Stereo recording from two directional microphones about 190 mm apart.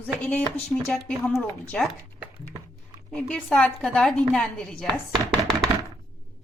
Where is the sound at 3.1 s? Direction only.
5° left (ahead or behind).